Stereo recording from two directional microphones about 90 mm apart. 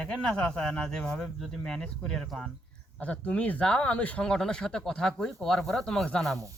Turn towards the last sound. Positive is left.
turn(degrees=5)  # may be behind; listen again after turning